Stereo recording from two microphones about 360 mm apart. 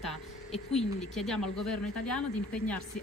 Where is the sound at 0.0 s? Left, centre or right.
Centre.